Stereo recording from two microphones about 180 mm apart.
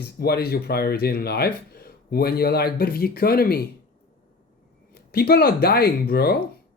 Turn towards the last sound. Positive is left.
turn(degrees=60)  # may be behind; listen again after turning